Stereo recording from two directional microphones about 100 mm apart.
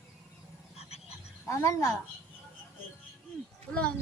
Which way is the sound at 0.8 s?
90° left.